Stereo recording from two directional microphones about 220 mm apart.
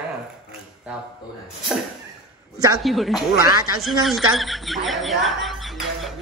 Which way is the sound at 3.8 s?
Centre (ahead or behind).